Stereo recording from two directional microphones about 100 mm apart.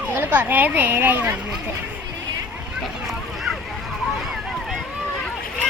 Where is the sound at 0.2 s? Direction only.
20° right (ahead or behind).